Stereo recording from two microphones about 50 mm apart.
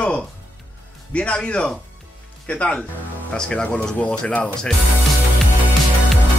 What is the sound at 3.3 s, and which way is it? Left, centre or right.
Speech, centre.